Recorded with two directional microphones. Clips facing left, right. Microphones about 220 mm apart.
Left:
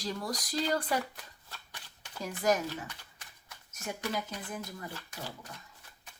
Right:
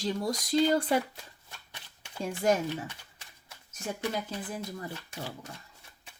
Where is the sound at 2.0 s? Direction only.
30° right (ahead or behind).